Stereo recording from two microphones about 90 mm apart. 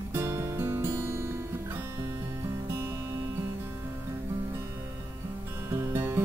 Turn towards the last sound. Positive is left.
turn(degrees=-25)  # may be behind; listen again after turning